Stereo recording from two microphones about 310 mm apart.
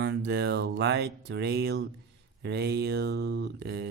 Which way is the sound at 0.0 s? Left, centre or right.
Right.